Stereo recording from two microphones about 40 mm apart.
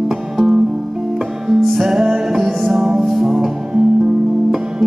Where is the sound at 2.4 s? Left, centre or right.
Centre.